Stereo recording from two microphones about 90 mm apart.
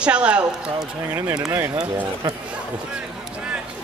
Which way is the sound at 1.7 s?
45° right (ahead or behind).